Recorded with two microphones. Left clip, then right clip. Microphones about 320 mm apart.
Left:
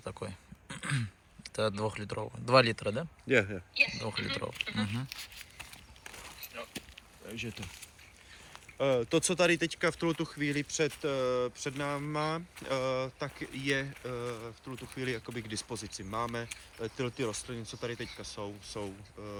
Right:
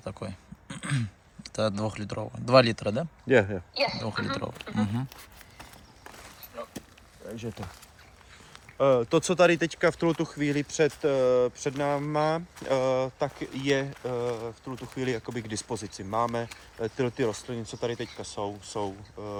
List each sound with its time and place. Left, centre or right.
0.0 s speech: centre
3.2 s speech: right
3.8 s speech: centre
7.3 s speech: centre
8.8 s speech: right